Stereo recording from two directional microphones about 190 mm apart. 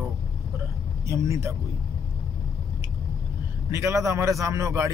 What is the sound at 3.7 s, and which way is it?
Speech, 15° right (ahead or behind).